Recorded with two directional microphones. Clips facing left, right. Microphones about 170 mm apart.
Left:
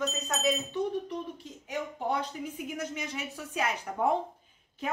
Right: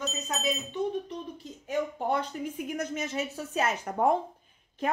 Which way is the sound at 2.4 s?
50° right (ahead or behind).